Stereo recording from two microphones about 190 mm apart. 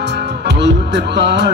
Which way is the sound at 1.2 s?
65° right (ahead or behind).